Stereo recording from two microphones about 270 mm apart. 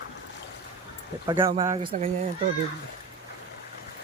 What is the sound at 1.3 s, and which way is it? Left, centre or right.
Speech, centre.